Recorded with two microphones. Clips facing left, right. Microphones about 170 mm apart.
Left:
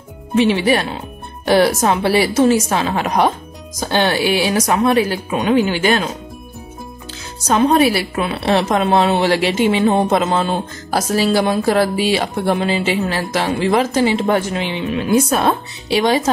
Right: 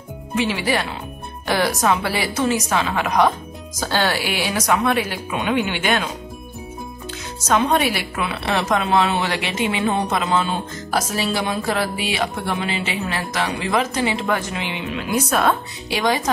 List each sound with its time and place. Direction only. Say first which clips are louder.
0.4 s a woman's voice: left 7 dB; 25° left (ahead or behind)
3.8 s a woman's voice: left 5 dB; 20° left (ahead or behind); by 6.0 s 35° left (ahead or behind)
7.4 s a woman's voice: left 5 dB; 35° left (ahead or behind)